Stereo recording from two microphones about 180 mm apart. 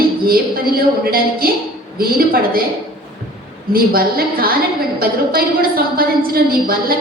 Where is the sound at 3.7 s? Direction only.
55° right (ahead or behind).